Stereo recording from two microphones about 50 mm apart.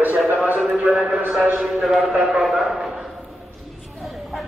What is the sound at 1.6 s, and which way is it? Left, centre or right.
Speech, centre.